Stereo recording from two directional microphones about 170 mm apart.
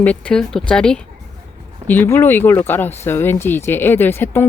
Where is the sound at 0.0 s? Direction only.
5° left (ahead or behind).